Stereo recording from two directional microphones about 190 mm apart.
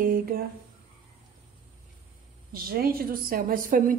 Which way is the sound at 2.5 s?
50° right (ahead or behind).